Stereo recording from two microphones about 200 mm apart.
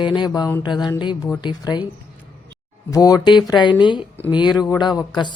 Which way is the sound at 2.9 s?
20° left (ahead or behind).